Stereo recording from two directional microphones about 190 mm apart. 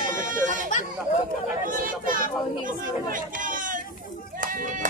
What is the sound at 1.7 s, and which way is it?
Chatter, 45° right (ahead or behind).